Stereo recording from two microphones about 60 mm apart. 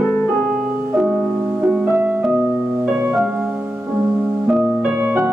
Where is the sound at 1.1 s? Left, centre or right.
Centre.